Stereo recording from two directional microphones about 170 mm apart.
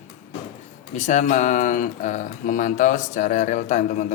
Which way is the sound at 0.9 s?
45° left (ahead or behind).